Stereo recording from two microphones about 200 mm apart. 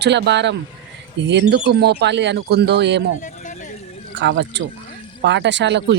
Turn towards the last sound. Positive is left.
turn(degrees=-60)  # may be behind; listen again after turning